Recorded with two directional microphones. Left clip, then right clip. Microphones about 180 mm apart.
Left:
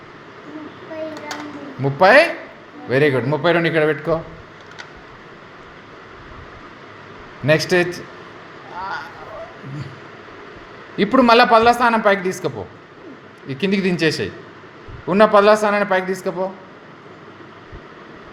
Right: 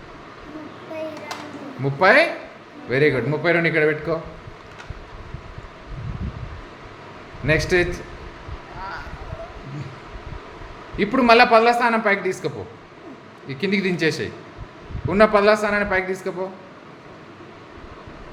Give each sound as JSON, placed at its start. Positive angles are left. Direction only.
{"t": 1.8, "sound": "a man's voice", "side_deg": 25}
{"t": 7.4, "sound": "a man's voice", "side_deg": 25}
{"t": 10.9, "sound": "a man's voice", "side_deg": 20}
{"t": 13.5, "sound": "a man's voice", "side_deg": 20}